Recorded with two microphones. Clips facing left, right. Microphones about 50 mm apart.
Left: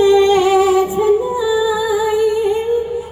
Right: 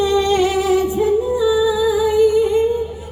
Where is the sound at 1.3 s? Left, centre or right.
Centre.